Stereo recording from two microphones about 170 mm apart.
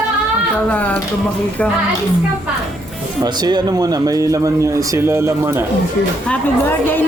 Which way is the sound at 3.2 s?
25° right (ahead or behind).